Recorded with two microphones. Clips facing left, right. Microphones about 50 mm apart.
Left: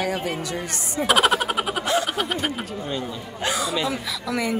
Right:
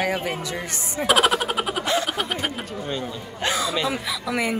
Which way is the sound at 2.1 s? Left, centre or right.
Centre.